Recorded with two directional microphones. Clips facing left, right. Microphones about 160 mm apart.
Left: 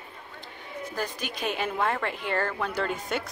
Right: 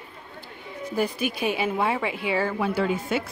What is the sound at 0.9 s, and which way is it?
A woman's voice, 10° right (ahead or behind).